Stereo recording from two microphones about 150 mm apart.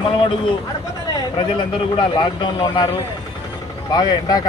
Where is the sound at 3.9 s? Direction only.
25° left (ahead or behind).